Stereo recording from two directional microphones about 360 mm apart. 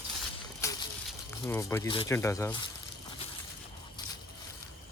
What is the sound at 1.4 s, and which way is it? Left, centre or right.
Speech, centre.